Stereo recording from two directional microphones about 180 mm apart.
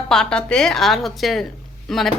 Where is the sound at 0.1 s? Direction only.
5° left (ahead or behind).